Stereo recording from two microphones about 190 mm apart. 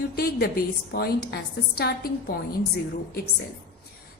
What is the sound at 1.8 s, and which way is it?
Speech, 55° left (ahead or behind).